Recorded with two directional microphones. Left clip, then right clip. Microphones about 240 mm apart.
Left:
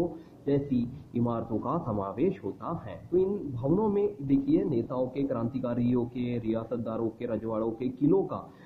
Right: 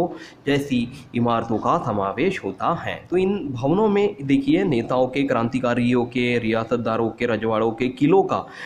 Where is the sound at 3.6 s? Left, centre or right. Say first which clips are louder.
Right 8 dB; right.